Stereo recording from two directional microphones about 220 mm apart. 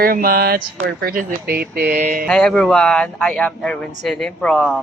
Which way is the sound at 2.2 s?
5° left (ahead or behind).